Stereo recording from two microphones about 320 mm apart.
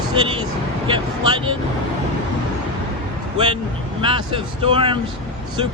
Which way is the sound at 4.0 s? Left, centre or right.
Centre.